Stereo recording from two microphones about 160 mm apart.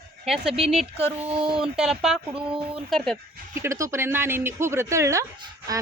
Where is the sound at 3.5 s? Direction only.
15° right (ahead or behind).